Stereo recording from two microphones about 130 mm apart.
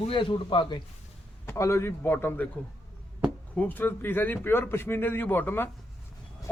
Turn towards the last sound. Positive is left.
turn(degrees=15)  # may be behind; listen again after turning